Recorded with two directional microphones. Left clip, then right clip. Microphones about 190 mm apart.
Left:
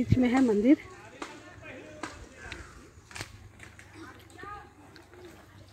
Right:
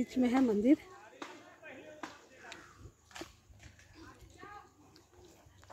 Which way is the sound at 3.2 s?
60° right (ahead or behind).